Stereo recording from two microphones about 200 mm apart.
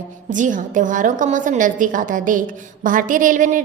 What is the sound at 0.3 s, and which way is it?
A woman's voice, 40° right (ahead or behind).